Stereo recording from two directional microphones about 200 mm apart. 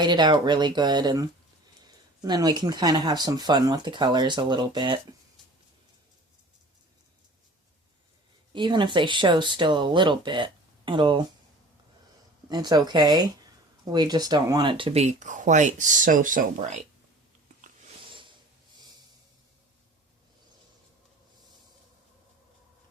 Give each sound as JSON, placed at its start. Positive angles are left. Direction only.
{"t": 0.0, "sound": "speech", "side_deg": -20}
{"t": 8.5, "sound": "speech", "side_deg": -25}
{"t": 12.5, "sound": "speech", "side_deg": -20}
{"t": 18.1, "sound": "a sound", "side_deg": -25}